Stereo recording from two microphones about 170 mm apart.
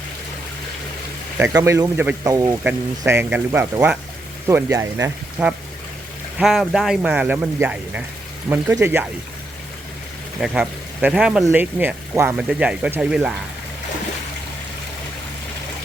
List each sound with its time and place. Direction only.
1.4 s speech: 15° right (ahead or behind)
5.4 s speech: 5° right (ahead or behind)
10.4 s speech: 5° right (ahead or behind)